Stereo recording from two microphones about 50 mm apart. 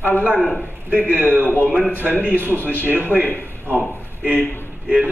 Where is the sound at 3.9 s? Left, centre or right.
Right.